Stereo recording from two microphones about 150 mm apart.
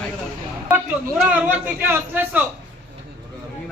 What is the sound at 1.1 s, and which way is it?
A man's voice, 10° right (ahead or behind).